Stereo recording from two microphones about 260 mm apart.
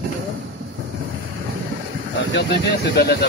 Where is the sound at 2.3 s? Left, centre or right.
Left.